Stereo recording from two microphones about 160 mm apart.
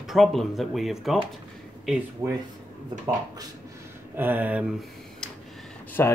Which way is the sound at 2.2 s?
20° right (ahead or behind).